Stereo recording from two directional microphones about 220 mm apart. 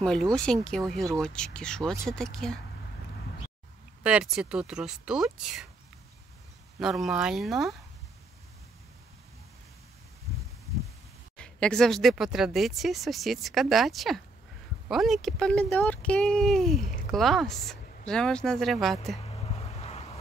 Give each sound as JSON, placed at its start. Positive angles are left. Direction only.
{"t": 0.0, "sound": "speech", "side_deg": 5}
{"t": 4.0, "sound": "speech", "side_deg": -5}
{"t": 6.8, "sound": "speech", "side_deg": 0}
{"t": 11.3, "sound": "speech", "side_deg": 5}
{"t": 19.2, "sound": "a sound", "side_deg": 25}